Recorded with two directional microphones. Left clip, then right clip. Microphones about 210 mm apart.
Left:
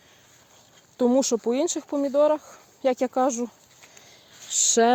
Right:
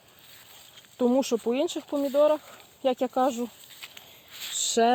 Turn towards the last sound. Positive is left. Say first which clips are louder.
# left 3 dB
turn(degrees=25)  # may be behind; listen again after turning